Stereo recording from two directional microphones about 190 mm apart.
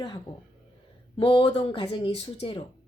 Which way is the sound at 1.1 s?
30° left (ahead or behind).